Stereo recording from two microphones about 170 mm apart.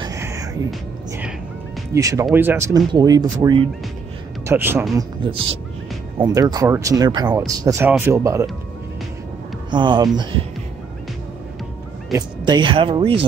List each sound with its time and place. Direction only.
0.0 s music: 20° right (ahead or behind)
2.0 s speech: 20° right (ahead or behind)
4.5 s speech: 15° right (ahead or behind)
4.9 s speech: 30° right (ahead or behind)
9.7 s speech: 25° right (ahead or behind)
12.1 s speech: 25° right (ahead or behind)